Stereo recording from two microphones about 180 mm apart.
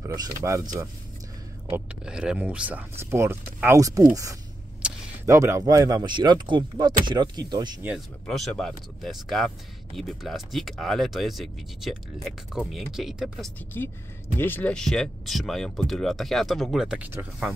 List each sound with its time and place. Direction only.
0.0 s speech: 20° right (ahead or behind)
1.7 s speech: 5° right (ahead or behind); by 7.8 s 25° right (ahead or behind)
8.3 s speech: 5° left (ahead or behind)
13.7 s a woman's voice: 10° left (ahead or behind); by 17.5 s 10° right (ahead or behind)